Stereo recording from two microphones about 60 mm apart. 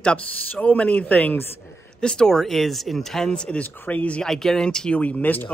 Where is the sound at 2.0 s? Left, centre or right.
Centre.